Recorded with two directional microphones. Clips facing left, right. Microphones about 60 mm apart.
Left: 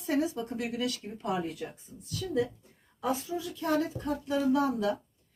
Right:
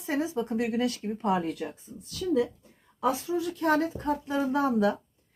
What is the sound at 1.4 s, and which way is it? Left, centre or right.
Speech, right.